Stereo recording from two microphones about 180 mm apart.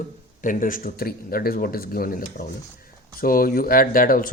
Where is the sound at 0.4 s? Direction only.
50° left (ahead or behind).